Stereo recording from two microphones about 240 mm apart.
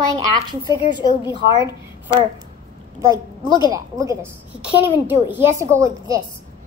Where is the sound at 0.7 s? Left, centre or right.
Centre.